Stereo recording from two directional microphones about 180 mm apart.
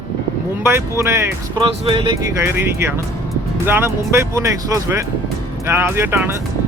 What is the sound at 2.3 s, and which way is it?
Speech, 15° right (ahead or behind).